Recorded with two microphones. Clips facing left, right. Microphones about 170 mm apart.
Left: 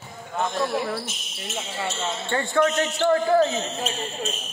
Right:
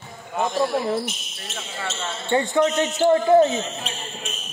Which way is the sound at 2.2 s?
20° right (ahead or behind).